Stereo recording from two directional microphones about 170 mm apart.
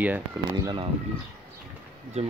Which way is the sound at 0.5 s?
25° right (ahead or behind).